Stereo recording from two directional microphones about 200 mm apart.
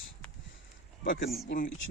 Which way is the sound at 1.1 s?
50° left (ahead or behind).